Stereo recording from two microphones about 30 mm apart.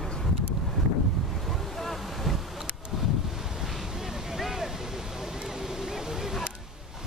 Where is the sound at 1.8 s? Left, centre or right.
Centre.